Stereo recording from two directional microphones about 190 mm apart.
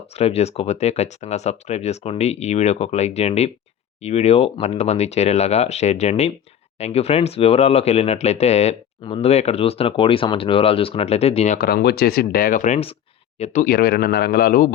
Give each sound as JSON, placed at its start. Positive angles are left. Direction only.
{"t": 0.2, "sound": "speech", "side_deg": 35}
{"t": 11.5, "sound": "speech", "side_deg": 55}